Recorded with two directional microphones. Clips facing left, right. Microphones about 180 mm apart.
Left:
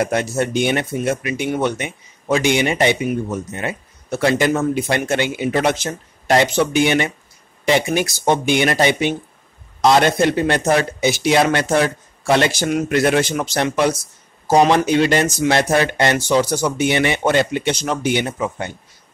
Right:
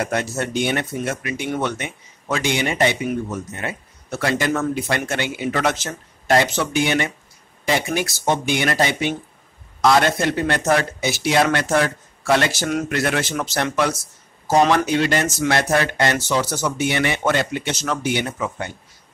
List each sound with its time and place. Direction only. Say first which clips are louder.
0.0 s a man's voice: left 4 dB; 15° left (ahead or behind)